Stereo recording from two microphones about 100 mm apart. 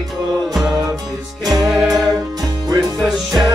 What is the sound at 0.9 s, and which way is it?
Music, 40° right (ahead or behind).